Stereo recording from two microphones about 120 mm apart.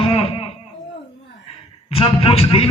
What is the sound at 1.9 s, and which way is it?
Speech, 55° left (ahead or behind).